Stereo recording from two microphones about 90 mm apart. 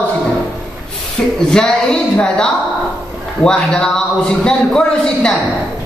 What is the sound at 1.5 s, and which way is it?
A man's voice, 10° left (ahead or behind).